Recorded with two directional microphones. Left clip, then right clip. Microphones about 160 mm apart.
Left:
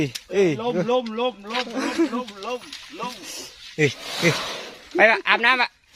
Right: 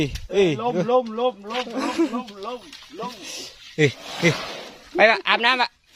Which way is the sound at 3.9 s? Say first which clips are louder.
Even; 35° left (ahead or behind).